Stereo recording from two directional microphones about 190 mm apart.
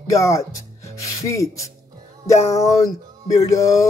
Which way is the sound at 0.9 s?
15° left (ahead or behind).